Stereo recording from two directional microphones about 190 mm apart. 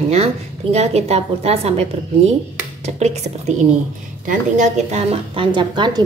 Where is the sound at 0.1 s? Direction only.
35° right (ahead or behind).